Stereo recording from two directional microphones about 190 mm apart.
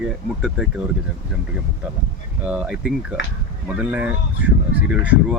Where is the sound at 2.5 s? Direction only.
5° right (ahead or behind).